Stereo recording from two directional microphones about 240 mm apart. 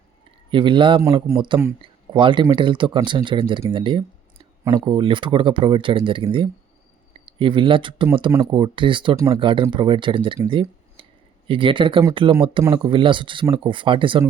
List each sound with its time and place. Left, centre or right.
0.5 s speech: right